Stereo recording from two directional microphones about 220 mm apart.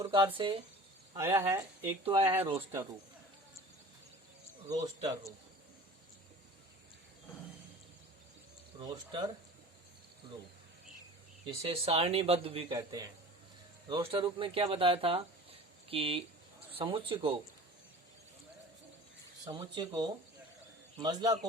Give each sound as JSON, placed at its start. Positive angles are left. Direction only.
{"t": 0.0, "sound": "speech", "side_deg": -20}
{"t": 1.1, "sound": "speech", "side_deg": -10}
{"t": 2.0, "sound": "speech", "side_deg": -25}
{"t": 4.7, "sound": "speech", "side_deg": -15}
{"t": 8.8, "sound": "speech", "side_deg": -20}
{"t": 11.4, "sound": "speech", "side_deg": -25}
{"t": 19.5, "sound": "speech", "side_deg": -20}